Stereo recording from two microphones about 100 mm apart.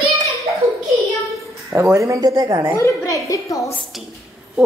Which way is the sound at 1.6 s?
30° right (ahead or behind).